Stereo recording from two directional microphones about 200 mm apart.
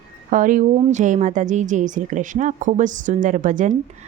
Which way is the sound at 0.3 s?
40° right (ahead or behind).